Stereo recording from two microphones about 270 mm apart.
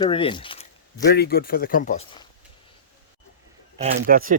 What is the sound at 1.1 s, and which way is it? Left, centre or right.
Speech, left.